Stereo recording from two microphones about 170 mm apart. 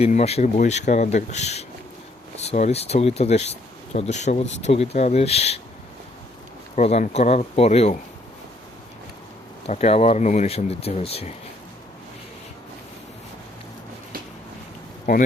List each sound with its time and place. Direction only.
0.0 s speech: 40° left (ahead or behind)
6.7 s speech: 40° left (ahead or behind)
9.6 s speech: 35° left (ahead or behind)